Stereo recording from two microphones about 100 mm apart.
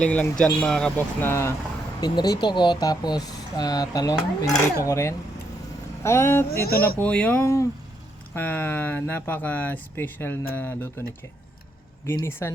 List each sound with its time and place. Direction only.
0.0 s speech: 10° left (ahead or behind)
0.9 s speech: 25° left (ahead or behind)
2.0 s speech: 45° left (ahead or behind); by 7.1 s 25° left (ahead or behind)
7.1 s speech: 15° left (ahead or behind)
7.4 s speech: 30° left (ahead or behind)
12.2 s speech: 25° left (ahead or behind)